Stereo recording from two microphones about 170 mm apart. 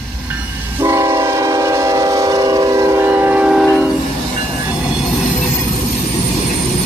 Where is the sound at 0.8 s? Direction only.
15° right (ahead or behind).